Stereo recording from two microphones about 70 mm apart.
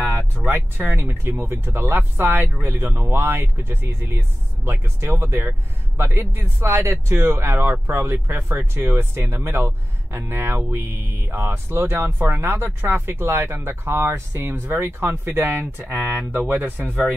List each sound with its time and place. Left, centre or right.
0.5 s speech: right